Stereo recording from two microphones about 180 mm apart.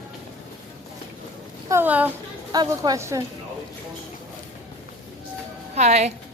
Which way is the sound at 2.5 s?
20° right (ahead or behind).